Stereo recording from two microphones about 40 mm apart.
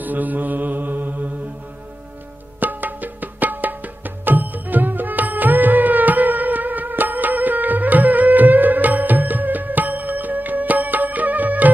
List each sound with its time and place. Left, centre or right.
0.0 s mantra: right
2.6 s music: right